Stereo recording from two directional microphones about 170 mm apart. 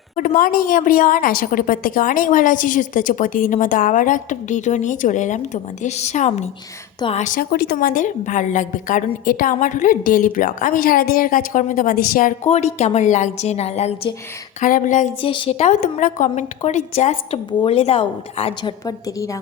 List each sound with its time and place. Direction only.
0.2 s a woman's voice: 55° left (ahead or behind)
7.5 s a woman's voice: 70° left (ahead or behind); by 12.3 s 55° left (ahead or behind)
12.5 s a woman's voice: 40° left (ahead or behind)
14.6 s a woman's voice: 50° left (ahead or behind)
15.2 s a woman's voice: 30° left (ahead or behind)
18.9 s a woman's voice: 20° left (ahead or behind)